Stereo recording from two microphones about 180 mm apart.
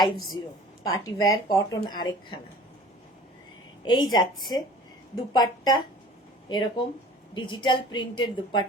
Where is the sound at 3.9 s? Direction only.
25° left (ahead or behind).